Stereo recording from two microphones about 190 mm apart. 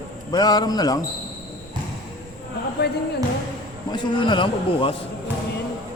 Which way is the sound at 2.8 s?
60° left (ahead or behind).